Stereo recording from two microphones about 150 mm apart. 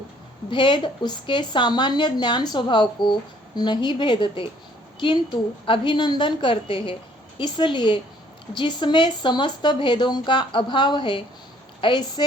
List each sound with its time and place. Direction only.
0.5 s a woman's voice: 30° left (ahead or behind)